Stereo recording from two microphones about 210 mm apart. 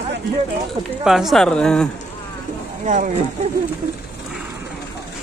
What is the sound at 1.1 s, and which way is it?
Speech, centre (ahead or behind).